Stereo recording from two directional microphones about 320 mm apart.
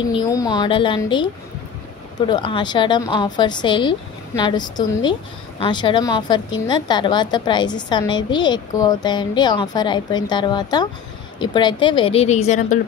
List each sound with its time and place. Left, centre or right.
0.1 s a woman's voice: centre
2.2 s a woman's voice: centre